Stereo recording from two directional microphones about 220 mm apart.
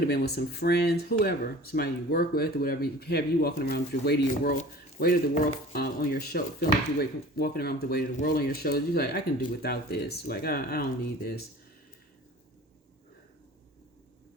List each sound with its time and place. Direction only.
0.1 s speech: 45° left (ahead or behind)